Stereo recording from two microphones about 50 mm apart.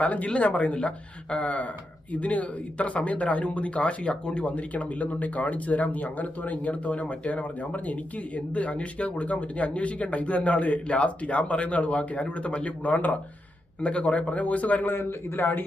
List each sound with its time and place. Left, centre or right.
0.0 s speech: left
13.8 s speech: left
14.9 s a man's voice: left